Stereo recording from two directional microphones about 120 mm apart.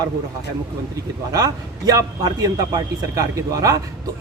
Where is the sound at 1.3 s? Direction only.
30° right (ahead or behind).